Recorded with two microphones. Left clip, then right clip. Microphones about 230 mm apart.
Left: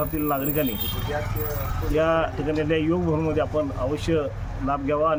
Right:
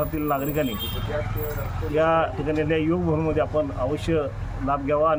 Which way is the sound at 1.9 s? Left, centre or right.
Centre.